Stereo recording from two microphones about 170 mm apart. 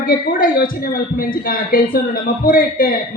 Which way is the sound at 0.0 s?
55° left (ahead or behind).